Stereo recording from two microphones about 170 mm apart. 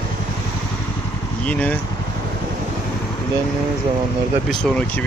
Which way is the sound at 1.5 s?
10° left (ahead or behind).